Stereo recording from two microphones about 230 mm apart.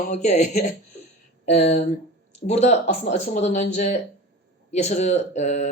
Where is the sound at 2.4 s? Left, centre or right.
Left.